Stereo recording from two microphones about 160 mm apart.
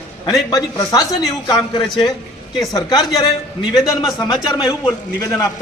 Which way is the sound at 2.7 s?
25° left (ahead or behind).